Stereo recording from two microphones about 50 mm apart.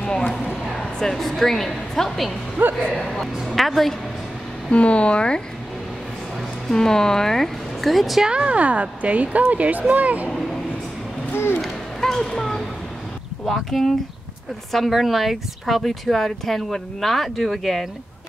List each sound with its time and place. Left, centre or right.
0.0 s a sound: centre
0.9 s speech: centre
2.8 s speech: centre
3.4 s speech: centre
4.6 s speech: left
6.7 s speech: centre
8.2 s speech: centre
11.3 s speech: left
11.6 s a sound: centre
13.5 s speech: centre